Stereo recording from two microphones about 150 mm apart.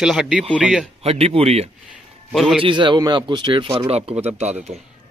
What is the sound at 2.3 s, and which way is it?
Speech, centre (ahead or behind).